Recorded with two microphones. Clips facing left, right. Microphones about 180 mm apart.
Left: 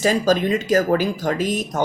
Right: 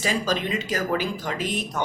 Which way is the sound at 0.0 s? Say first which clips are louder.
Left 8 dB; 45° left (ahead or behind).